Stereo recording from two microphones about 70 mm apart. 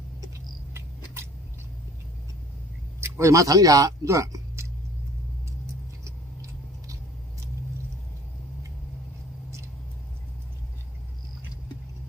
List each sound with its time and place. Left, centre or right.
0.7 s cat: right
3.0 s speech: right
6.0 s vehicle: right